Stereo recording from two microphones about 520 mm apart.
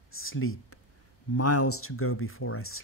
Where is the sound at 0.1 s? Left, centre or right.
Left.